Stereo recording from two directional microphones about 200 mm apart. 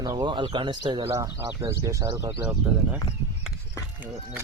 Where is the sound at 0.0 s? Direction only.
20° right (ahead or behind).